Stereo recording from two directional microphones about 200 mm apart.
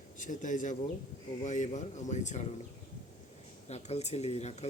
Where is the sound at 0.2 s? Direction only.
40° left (ahead or behind).